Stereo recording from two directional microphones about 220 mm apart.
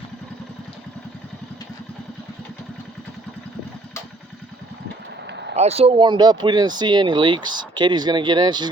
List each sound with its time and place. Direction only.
5.5 s speech: 30° right (ahead or behind)